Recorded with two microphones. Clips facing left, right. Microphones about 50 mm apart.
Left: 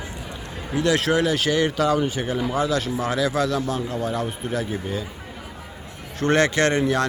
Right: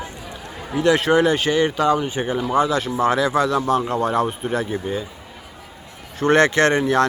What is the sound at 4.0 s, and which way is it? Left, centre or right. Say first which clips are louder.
Speech: right 6 dB; right.